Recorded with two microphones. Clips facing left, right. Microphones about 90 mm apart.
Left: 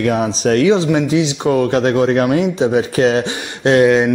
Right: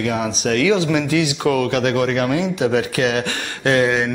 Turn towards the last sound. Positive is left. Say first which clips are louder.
# left 7 dB
turn(degrees=15)  # may be behind; listen again after turning